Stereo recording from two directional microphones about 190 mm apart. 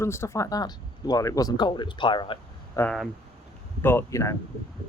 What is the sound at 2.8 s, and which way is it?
Speech, 5° left (ahead or behind).